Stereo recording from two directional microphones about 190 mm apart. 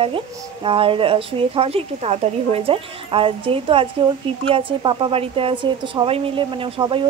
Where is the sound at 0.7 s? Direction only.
30° right (ahead or behind).